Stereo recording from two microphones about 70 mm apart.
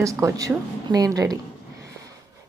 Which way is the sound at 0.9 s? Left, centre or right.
Right.